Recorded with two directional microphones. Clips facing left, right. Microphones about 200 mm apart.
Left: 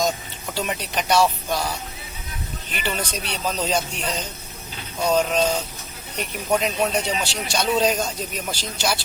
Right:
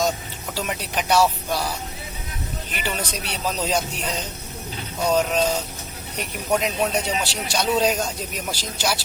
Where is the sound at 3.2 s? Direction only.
10° right (ahead or behind).